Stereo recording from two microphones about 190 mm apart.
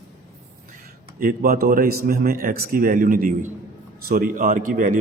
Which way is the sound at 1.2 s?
50° right (ahead or behind).